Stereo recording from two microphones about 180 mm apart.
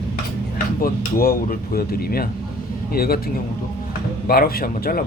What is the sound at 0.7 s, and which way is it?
Speech, 55° left (ahead or behind).